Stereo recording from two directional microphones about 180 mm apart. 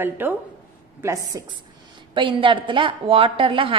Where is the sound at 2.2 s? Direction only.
30° right (ahead or behind).